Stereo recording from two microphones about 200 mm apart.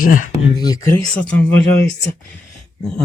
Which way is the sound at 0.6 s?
15° left (ahead or behind).